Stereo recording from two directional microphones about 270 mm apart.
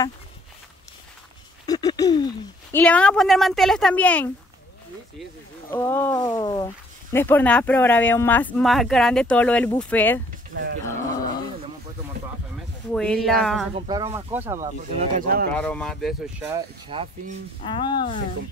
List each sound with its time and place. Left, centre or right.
1.7 s speech: centre
5.7 s speech: centre
12.9 s speech: centre
13.7 s speech: centre
15.0 s speech: right
15.5 s speech: centre
17.6 s speech: centre